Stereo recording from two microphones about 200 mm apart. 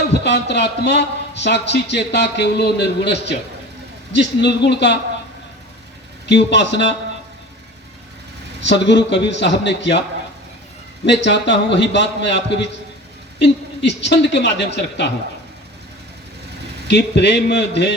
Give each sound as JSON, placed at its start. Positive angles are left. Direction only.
{"t": 0.1, "sound": "a man's voice", "side_deg": 60}
{"t": 6.2, "sound": "a man's voice", "side_deg": 60}
{"t": 8.6, "sound": "a man's voice", "side_deg": 60}
{"t": 11.0, "sound": "a man's voice", "side_deg": 60}
{"t": 13.4, "sound": "a man's voice", "side_deg": 60}
{"t": 16.9, "sound": "a man's voice", "side_deg": 60}